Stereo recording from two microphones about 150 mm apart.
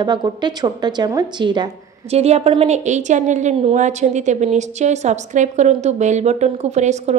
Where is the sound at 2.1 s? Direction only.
45° right (ahead or behind).